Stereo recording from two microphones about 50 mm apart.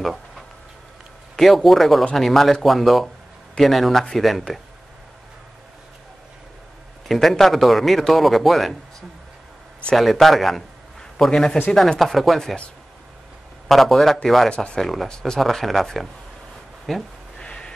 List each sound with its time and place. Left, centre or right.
1.3 s a man's voice: centre
7.1 s a man's voice: centre
10.1 s a man's voice: centre
12.0 s a man's voice: centre
13.7 s a man's voice: centre
15.4 s a man's voice: centre
17.4 s crow: centre